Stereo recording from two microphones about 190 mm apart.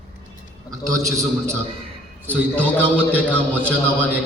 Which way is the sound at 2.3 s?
10° left (ahead or behind).